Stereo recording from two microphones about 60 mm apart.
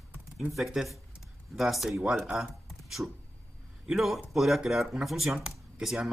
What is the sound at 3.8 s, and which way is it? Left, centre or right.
A man's voice, centre.